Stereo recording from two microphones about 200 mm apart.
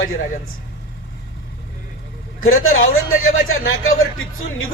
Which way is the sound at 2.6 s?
90° left.